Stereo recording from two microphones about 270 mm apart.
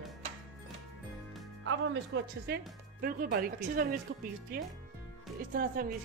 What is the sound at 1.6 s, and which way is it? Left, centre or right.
Speech, right.